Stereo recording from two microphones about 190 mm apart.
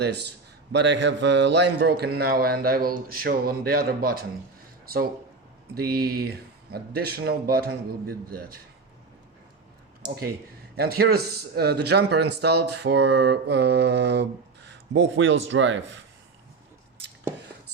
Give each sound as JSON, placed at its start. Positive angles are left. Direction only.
{"t": 0.0, "sound": "a man's voice", "side_deg": -60}
{"t": 5.7, "sound": "a man's voice", "side_deg": -55}
{"t": 10.8, "sound": "a man's voice", "side_deg": -55}